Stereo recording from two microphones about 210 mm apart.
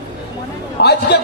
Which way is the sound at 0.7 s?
50° left (ahead or behind).